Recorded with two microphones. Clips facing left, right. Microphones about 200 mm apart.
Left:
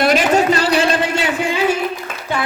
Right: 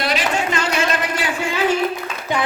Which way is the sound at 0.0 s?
45° left (ahead or behind).